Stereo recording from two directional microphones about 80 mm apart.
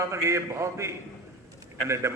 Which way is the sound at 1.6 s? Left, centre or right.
Right.